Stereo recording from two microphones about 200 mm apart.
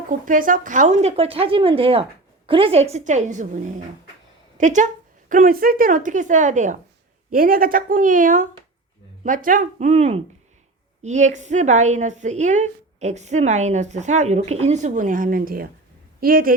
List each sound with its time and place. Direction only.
0.1 s a woman's voice: 40° right (ahead or behind)